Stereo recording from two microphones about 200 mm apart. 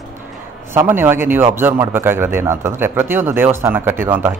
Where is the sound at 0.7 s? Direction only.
10° right (ahead or behind).